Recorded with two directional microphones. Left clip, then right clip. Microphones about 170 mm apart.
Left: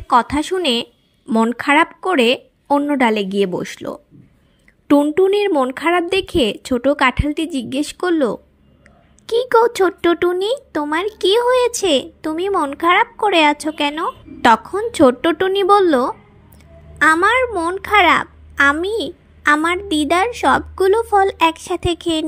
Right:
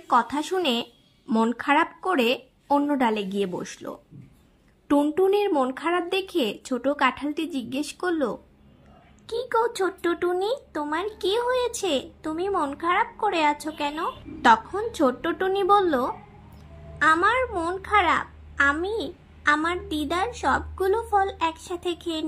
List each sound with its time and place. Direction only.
0.1 s a child's voice: 25° left (ahead or behind)